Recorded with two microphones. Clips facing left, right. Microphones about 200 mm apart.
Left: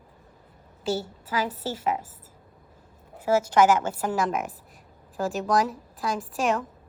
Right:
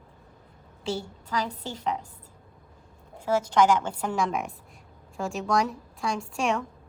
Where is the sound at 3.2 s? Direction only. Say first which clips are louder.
Left 2 dB; 10° left (ahead or behind).